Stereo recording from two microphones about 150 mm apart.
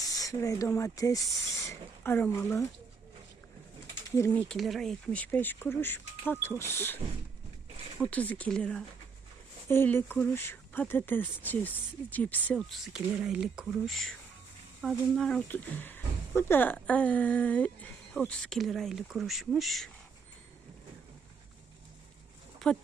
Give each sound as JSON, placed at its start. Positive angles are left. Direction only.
{"t": 0.1, "sound": "speech", "side_deg": 25}
{"t": 4.1, "sound": "speech", "side_deg": 20}
{"t": 4.4, "sound": "speech", "side_deg": 0}
{"t": 8.0, "sound": "speech", "side_deg": 10}
{"t": 12.7, "sound": "speech", "side_deg": 0}
{"t": 15.4, "sound": "speech", "side_deg": 10}
{"t": 22.5, "sound": "a sound", "side_deg": 5}